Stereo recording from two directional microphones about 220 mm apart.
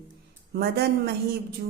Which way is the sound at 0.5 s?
45° right (ahead or behind).